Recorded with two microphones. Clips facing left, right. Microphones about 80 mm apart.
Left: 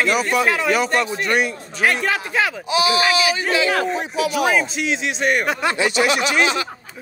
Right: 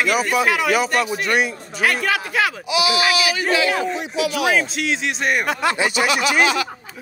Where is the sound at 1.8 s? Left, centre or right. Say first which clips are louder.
Even; left.